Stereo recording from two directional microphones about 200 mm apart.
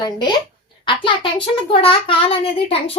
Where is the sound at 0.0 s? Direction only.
20° left (ahead or behind).